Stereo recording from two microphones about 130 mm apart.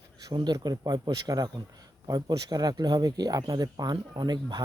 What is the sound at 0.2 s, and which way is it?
Speech, 30° right (ahead or behind).